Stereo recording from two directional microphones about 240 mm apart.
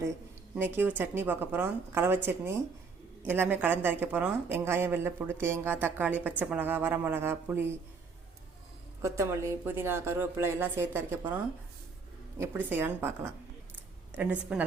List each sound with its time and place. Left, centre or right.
0.5 s speech: centre
9.0 s speech: centre
12.4 s a woman's voice: centre